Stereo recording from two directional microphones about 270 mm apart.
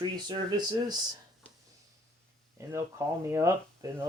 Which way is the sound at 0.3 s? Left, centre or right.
Centre.